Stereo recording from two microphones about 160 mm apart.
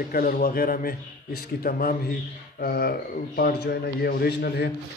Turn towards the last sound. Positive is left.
turn(degrees=85)